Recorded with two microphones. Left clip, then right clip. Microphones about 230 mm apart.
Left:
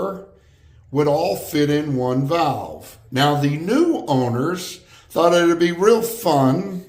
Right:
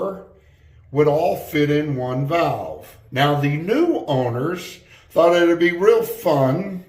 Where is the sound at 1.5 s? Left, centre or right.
Left.